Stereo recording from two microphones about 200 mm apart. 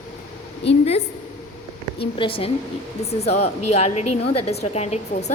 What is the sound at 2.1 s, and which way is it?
A woman's voice, 25° left (ahead or behind).